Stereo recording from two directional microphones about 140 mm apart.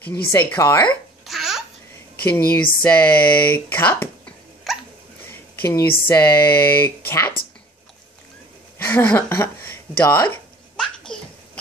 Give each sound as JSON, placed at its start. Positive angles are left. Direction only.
{"t": 0.3, "sound": "speech", "side_deg": 15}
{"t": 1.2, "sound": "babbling", "side_deg": 0}
{"t": 2.5, "sound": "speech", "side_deg": 10}
{"t": 4.7, "sound": "hiccup", "side_deg": 0}
{"t": 5.6, "sound": "speech", "side_deg": 15}
{"t": 8.8, "sound": "a sound", "side_deg": 15}